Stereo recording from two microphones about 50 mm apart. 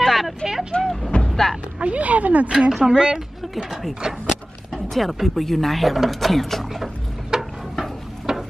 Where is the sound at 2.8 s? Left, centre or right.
Centre.